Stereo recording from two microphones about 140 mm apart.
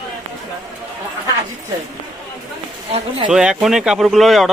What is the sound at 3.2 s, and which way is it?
Speech, 5° right (ahead or behind).